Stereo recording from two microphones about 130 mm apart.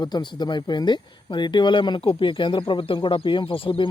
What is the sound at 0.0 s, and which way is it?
Speech, 35° left (ahead or behind).